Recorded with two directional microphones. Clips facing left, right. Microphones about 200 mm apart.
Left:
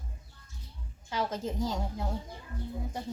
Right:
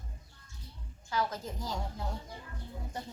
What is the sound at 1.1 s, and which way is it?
Speech, 20° left (ahead or behind).